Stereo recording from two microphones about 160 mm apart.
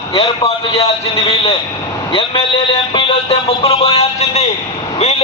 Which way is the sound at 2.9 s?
35° left (ahead or behind).